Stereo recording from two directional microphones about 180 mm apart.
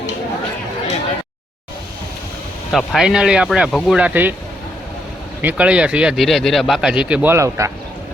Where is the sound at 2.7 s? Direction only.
Centre (ahead or behind).